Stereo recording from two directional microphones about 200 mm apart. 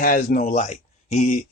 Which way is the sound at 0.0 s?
45° left (ahead or behind).